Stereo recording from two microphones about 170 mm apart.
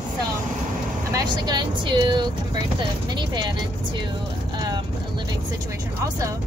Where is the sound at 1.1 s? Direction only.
20° right (ahead or behind).